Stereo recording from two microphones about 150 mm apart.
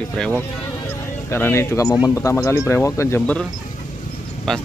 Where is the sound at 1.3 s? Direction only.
15° left (ahead or behind).